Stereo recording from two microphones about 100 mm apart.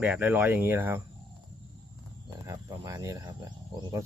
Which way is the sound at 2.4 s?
35° right (ahead or behind).